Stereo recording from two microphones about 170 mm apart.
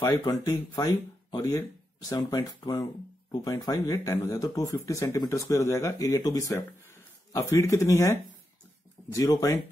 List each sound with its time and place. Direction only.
0.0 s speech: 20° left (ahead or behind)